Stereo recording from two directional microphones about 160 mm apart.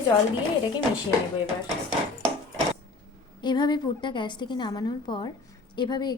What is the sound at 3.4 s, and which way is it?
A woman's voice, 25° left (ahead or behind).